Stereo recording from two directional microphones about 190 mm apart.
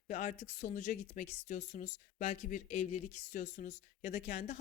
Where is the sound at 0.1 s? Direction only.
40° left (ahead or behind).